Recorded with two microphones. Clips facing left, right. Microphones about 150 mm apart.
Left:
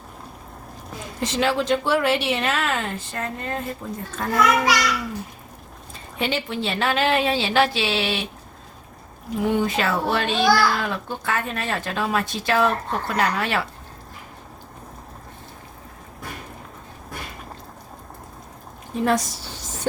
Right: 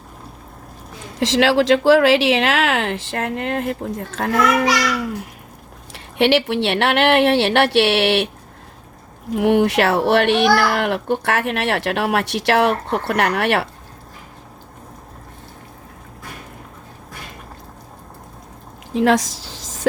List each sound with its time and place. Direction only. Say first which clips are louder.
1.2 s speech: right 7 dB; 90° right
5.9 s a child's voice: right 10 dB; 80° right
9.3 s a child's voice: right 6 dB; 70° right (ahead or behind)
18.9 s speech: right 5 dB; 90° right